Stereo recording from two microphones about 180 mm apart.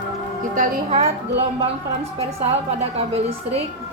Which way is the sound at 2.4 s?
35° right (ahead or behind).